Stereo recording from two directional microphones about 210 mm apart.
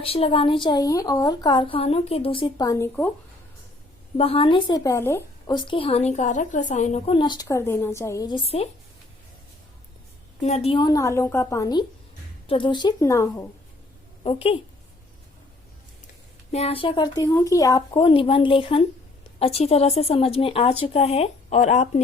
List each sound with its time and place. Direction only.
0.0 s a woman's voice: 25° left (ahead or behind); by 3.1 s 10° left (ahead or behind)
4.2 s a woman's voice: 25° left (ahead or behind)
10.4 s a woman's voice: 30° left (ahead or behind); by 13.5 s 15° left (ahead or behind)
14.3 s a woman's voice: 25° left (ahead or behind)
16.5 s a woman's voice: 30° left (ahead or behind)